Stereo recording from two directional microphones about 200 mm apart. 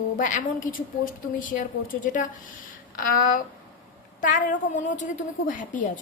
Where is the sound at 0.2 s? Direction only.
40° left (ahead or behind).